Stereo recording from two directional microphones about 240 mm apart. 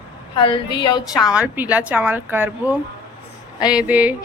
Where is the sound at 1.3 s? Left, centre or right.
Centre.